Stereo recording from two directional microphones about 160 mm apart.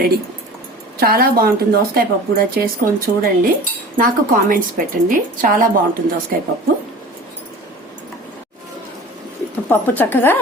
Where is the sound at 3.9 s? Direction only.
60° right (ahead or behind).